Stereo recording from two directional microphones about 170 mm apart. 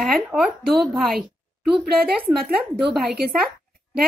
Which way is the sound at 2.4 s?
Centre (ahead or behind).